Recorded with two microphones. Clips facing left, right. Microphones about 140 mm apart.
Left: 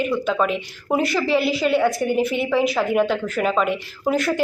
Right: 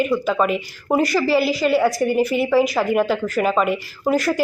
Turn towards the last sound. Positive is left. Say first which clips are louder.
# right 2 dB
turn(degrees=0)  # may be behind; listen again after turning